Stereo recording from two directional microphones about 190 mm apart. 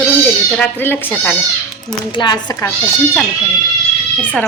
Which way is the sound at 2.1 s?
25° left (ahead or behind).